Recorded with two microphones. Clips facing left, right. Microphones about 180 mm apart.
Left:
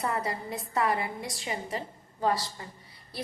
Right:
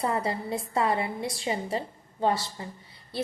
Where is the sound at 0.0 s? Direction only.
25° right (ahead or behind).